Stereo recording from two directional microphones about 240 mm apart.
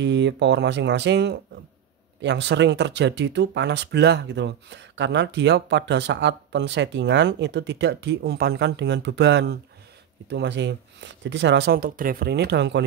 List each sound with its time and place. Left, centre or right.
0.0 s speech: right